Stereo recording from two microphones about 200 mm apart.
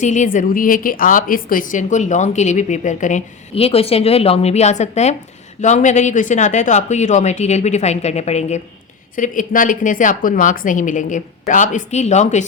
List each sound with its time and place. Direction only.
0.0 s a woman's voice: 35° left (ahead or behind)